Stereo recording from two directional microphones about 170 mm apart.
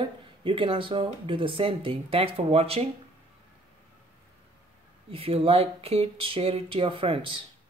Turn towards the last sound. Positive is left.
turn(degrees=-30)  # may be behind; listen again after turning